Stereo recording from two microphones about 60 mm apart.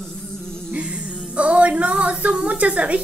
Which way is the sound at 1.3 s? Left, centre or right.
Right.